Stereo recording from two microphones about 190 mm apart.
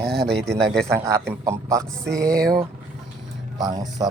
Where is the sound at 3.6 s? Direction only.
20° right (ahead or behind).